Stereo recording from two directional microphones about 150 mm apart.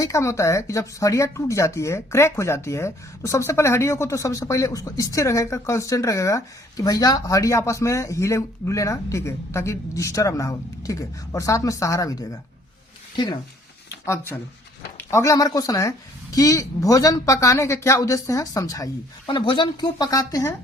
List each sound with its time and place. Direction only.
0.0 s speech: 20° left (ahead or behind)
14.0 s speech: 15° left (ahead or behind)